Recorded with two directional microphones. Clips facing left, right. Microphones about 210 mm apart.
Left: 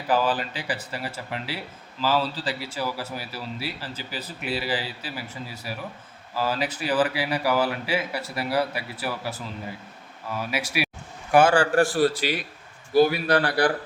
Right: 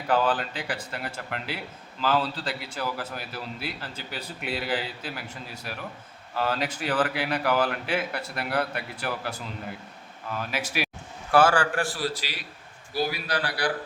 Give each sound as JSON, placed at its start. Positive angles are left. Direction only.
{"t": 0.1, "sound": "a man's voice", "side_deg": 5}
{"t": 10.3, "sound": "a man's voice", "side_deg": 10}
{"t": 11.6, "sound": "a man's voice", "side_deg": 40}